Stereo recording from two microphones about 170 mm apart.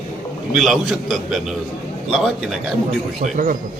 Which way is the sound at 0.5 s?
Centre (ahead or behind).